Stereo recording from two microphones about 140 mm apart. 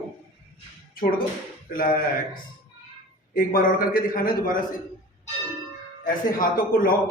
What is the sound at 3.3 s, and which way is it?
A man's voice, 80° left.